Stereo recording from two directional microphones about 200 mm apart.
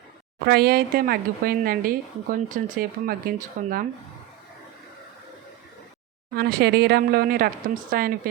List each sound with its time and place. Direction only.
0.4 s speech: 50° right (ahead or behind)
6.3 s speech: 50° right (ahead or behind)